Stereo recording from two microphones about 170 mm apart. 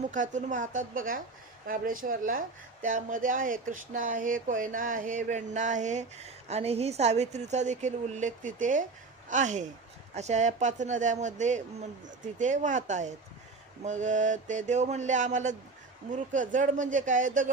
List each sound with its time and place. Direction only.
0.1 s a woman's voice: 45° right (ahead or behind)